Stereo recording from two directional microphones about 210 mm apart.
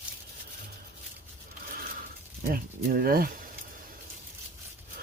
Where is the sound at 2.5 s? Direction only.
45° right (ahead or behind).